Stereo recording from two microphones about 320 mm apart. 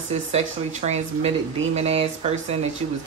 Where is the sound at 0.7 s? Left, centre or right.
Right.